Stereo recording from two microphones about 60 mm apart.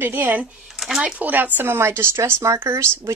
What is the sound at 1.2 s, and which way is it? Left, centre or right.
Speech, right.